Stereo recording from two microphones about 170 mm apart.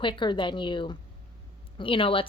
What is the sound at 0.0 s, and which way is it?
A woman's voice, 30° left (ahead or behind).